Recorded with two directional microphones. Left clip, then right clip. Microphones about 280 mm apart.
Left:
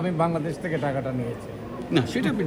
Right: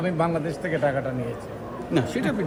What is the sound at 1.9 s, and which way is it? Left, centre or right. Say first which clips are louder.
Speech: even; centre.